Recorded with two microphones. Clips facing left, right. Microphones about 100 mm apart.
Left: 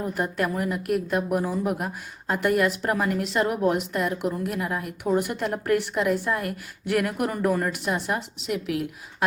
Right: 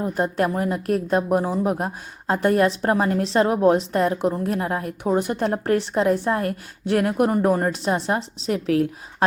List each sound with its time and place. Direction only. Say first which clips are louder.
0.0 s a woman's voice: right 4 dB; 30° right (ahead or behind)